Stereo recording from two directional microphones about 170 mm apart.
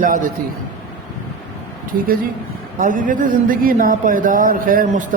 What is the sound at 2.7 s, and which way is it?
A man's voice, 50° right (ahead or behind).